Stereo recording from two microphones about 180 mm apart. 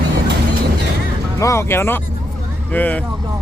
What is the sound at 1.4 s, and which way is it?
Speech, 15° left (ahead or behind).